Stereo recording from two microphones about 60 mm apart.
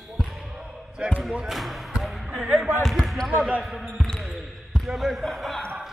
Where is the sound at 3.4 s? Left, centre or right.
Right.